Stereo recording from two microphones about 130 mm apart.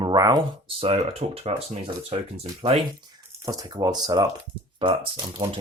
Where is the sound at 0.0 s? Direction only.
30° right (ahead or behind).